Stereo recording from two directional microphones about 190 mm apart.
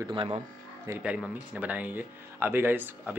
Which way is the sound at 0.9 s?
5° right (ahead or behind).